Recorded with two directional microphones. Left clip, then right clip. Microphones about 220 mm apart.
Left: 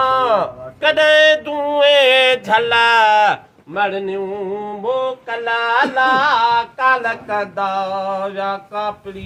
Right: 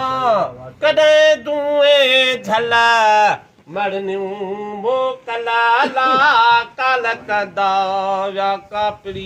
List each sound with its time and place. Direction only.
0.2 s speech: centre (ahead or behind); by 3.3 s 20° right (ahead or behind)
3.8 s speech: 35° right (ahead or behind)
4.9 s music: 50° right (ahead or behind)